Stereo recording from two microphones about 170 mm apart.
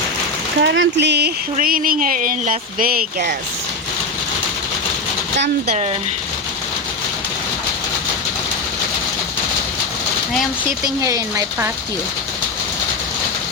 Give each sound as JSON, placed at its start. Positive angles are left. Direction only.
{"t": 0.6, "sound": "speech", "side_deg": -90}
{"t": 1.5, "sound": "speech", "side_deg": -55}
{"t": 10.8, "sound": "speech", "side_deg": -20}